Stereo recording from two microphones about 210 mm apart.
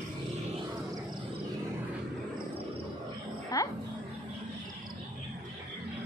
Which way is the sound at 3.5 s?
15° left (ahead or behind).